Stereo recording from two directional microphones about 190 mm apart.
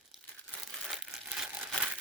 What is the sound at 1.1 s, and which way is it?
Crumpling, centre (ahead or behind).